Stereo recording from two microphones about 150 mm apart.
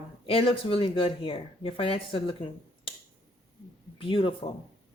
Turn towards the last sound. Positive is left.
turn(degrees=35)  # may be behind; listen again after turning